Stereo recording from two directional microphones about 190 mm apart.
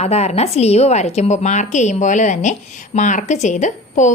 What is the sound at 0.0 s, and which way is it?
A woman's voice, 35° left (ahead or behind).